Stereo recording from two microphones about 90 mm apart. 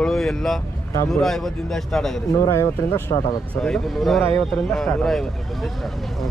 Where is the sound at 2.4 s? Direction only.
30° left (ahead or behind).